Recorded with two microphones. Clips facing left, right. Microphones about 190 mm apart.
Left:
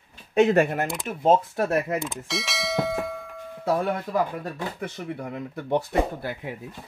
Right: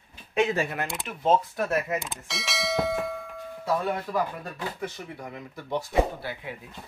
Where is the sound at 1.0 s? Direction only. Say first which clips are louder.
Left 3 dB; 40° left (ahead or behind).